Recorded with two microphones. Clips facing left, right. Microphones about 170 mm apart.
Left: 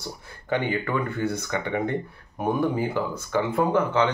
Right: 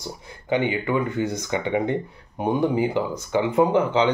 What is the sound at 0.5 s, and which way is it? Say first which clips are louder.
Speech: right 3 dB; 15° right (ahead or behind).